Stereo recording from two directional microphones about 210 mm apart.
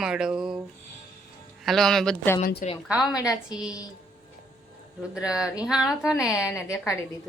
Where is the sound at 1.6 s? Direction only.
Centre (ahead or behind).